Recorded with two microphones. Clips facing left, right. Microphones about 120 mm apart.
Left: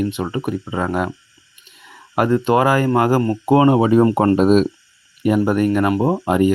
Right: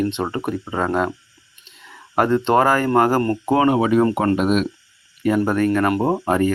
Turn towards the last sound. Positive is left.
turn(degrees=15)  # may be behind; listen again after turning